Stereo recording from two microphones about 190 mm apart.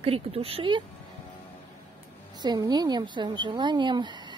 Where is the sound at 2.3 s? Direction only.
20° right (ahead or behind).